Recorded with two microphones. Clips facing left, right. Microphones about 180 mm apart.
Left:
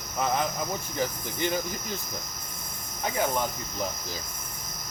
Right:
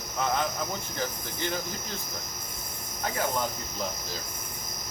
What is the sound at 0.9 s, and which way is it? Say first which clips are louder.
Cricket: left 6 dB; 15° left (ahead or behind).